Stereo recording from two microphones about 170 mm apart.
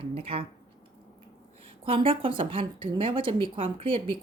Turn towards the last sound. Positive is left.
turn(degrees=-30)  # may be behind; listen again after turning